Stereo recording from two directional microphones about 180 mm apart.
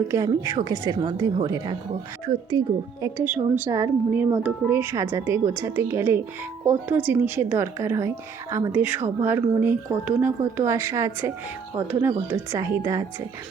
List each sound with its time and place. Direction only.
0.1 s a woman's voice: 20° right (ahead or behind)